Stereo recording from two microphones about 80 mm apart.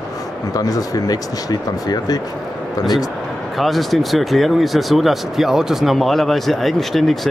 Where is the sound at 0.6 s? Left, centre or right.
Left.